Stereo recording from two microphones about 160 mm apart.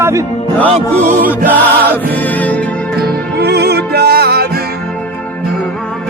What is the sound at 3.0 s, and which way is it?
Music, 90° right.